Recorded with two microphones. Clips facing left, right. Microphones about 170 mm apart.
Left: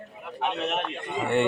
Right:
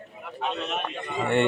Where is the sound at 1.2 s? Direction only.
5° left (ahead or behind).